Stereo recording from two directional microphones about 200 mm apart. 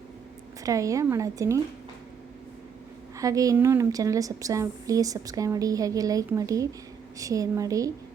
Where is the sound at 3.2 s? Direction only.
15° right (ahead or behind).